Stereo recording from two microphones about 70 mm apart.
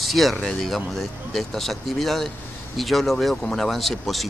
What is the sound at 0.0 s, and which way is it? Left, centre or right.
Speech, centre.